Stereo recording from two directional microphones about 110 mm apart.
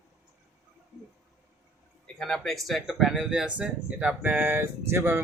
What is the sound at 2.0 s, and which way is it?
Speech, 5° left (ahead or behind).